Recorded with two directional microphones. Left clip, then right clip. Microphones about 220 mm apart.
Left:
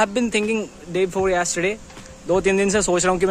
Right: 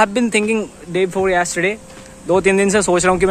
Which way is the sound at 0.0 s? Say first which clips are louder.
Right 5 dB; centre (ahead or behind).